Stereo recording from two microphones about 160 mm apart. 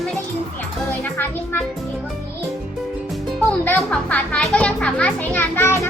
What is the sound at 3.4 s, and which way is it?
Music, 10° left (ahead or behind).